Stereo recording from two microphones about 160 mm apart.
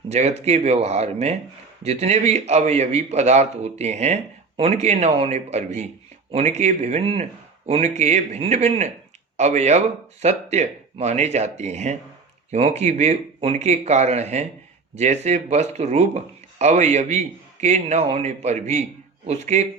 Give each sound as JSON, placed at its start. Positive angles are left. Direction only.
{"t": 0.1, "sound": "a man's voice", "side_deg": -45}